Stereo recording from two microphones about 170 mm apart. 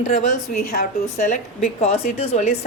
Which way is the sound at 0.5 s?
55° left (ahead or behind).